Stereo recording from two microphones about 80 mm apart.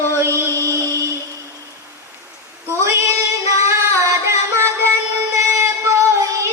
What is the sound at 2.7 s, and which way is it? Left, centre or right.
Female singing, right.